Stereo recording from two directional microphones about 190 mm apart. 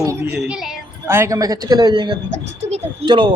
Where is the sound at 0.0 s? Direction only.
15° right (ahead or behind).